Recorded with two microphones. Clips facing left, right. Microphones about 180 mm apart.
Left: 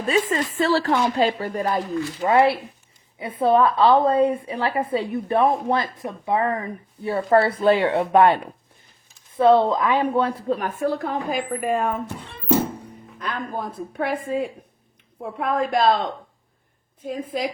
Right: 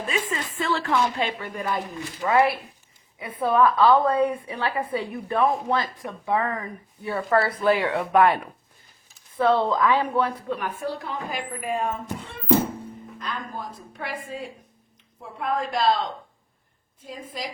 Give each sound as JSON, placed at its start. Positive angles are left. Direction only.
{"t": 0.1, "sound": "a woman's voice", "side_deg": 35}
{"t": 10.5, "sound": "a woman's voice", "side_deg": 45}
{"t": 13.1, "sound": "a woman's voice", "side_deg": 60}
{"t": 17.1, "sound": "a woman's voice", "side_deg": 55}